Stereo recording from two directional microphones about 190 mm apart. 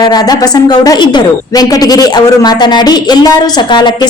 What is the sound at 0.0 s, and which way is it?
A woman's voice, 20° left (ahead or behind).